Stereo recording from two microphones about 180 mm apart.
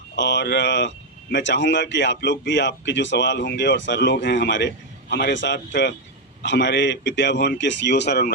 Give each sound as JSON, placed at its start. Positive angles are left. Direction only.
{"t": 0.2, "sound": "speech", "side_deg": 75}